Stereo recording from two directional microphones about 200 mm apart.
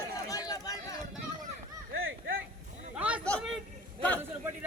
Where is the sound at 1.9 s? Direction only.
75° right (ahead or behind).